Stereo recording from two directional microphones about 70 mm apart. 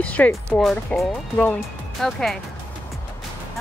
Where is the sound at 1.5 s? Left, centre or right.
Centre.